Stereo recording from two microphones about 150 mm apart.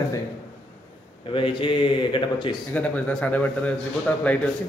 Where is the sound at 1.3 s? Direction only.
35° left (ahead or behind).